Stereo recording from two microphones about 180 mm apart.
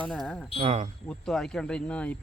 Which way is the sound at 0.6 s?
35° right (ahead or behind).